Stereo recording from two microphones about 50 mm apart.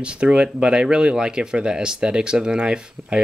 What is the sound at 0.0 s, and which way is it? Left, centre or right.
Speech, right.